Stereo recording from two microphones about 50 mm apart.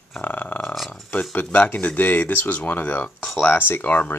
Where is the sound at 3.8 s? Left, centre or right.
Left.